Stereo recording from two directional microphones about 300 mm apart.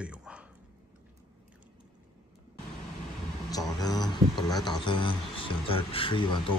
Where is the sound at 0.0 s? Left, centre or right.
Centre.